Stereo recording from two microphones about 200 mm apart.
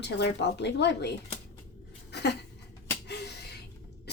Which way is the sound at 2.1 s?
55° left (ahead or behind).